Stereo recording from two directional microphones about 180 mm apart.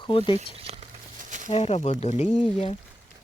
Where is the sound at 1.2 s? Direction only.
45° right (ahead or behind).